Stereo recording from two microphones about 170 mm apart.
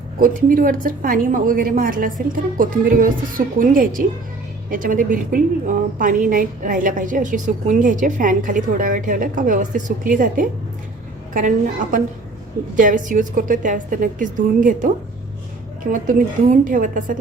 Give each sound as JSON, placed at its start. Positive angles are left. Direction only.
{"t": 0.2, "sound": "a woman's voice", "side_deg": -55}
{"t": 15.9, "sound": "a woman's voice", "side_deg": -50}